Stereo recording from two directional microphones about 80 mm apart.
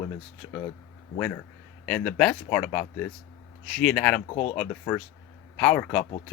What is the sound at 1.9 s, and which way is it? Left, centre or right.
Speech, centre.